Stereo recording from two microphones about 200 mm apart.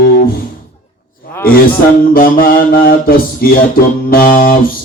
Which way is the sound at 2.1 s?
45° left (ahead or behind).